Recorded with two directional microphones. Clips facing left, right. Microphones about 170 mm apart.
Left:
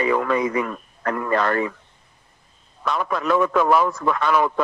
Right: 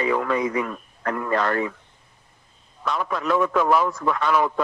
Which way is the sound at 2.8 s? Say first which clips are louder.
Left 2 dB; 65° left (ahead or behind).